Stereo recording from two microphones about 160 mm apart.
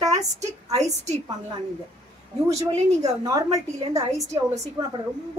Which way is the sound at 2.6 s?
20° right (ahead or behind).